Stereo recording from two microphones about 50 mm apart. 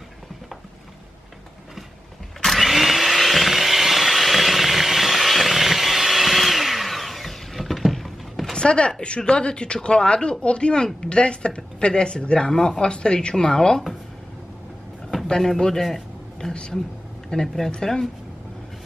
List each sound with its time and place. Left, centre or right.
2.4 s blender: centre
8.5 s speech: left
15.2 s a man's voice: centre